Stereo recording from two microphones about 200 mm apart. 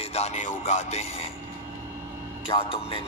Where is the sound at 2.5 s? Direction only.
30° left (ahead or behind).